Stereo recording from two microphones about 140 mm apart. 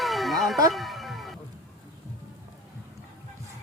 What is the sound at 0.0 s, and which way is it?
Music, centre (ahead or behind).